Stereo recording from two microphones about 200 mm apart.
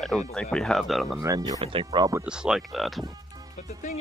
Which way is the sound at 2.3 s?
5° right (ahead or behind).